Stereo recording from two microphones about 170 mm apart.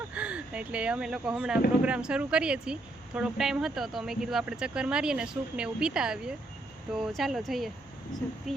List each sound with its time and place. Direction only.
0.1 s speech: 5° right (ahead or behind)